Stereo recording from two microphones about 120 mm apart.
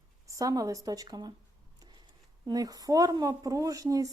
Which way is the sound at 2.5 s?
30° right (ahead or behind).